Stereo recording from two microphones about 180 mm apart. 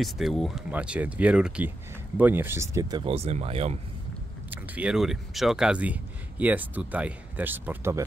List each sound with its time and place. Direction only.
0.0 s speech: centre (ahead or behind); by 3.7 s 35° right (ahead or behind)
4.5 s speech: 5° right (ahead or behind)